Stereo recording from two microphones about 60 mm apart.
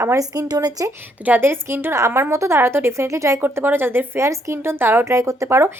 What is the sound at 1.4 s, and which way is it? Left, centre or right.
Speech, right.